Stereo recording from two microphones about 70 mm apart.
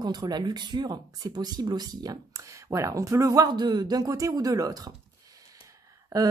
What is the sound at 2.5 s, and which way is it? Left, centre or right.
Speech, right.